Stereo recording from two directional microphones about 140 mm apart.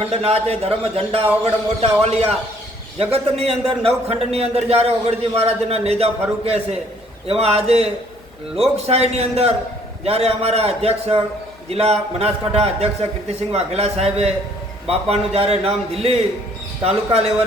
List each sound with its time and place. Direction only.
0.0 s a man's voice: 45° right (ahead or behind)